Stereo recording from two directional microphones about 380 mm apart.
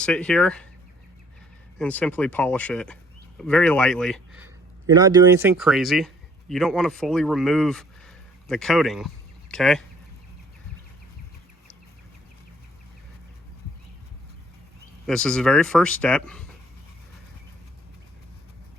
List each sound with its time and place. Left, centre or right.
0.0 s speech: centre
1.8 s speech: centre
15.0 s speech: centre